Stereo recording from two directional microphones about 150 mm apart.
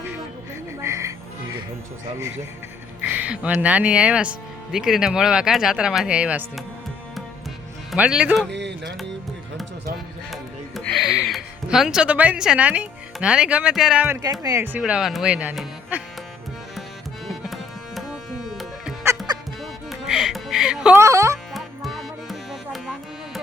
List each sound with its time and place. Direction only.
0.8 s music: 20° right (ahead or behind)
3.0 s speech: 10° right (ahead or behind)
7.9 s speech: 10° right (ahead or behind)
10.3 s music: centre (ahead or behind)
14.3 s speech: 20° right (ahead or behind)
14.8 s speech: 5° right (ahead or behind)
17.2 s tabla: centre (ahead or behind)
19.3 s music: 30° right (ahead or behind)
19.9 s music: 5° right (ahead or behind)
21.0 s music: 20° right (ahead or behind)
21.5 s music: centre (ahead or behind)